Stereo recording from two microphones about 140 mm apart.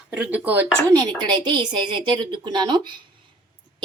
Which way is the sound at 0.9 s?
30° right (ahead or behind).